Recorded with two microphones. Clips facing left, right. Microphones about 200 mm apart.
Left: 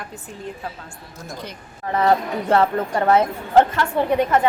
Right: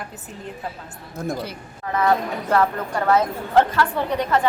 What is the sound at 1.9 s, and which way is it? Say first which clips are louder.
A woman's voice: left 2 dB; 30° left (ahead or behind).